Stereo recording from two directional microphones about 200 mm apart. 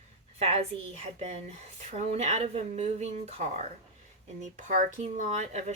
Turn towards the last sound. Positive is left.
turn(degrees=-35)  # may be behind; listen again after turning